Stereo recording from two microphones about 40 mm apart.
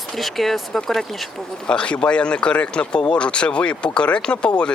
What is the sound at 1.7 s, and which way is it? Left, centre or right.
Speech, left.